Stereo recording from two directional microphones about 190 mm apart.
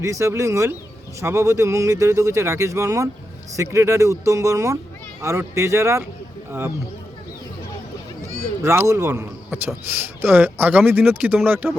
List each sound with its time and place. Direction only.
0.0 s a man's voice: 15° right (ahead or behind)
8.6 s a man's voice: 15° right (ahead or behind)